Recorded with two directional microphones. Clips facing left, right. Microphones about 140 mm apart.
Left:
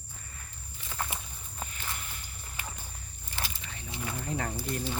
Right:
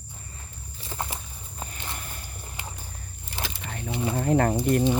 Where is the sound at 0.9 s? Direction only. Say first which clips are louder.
Right 3 dB; 25° right (ahead or behind).